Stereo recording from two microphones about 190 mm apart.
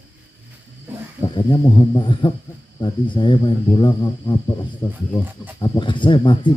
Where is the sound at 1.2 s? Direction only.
25° left (ahead or behind).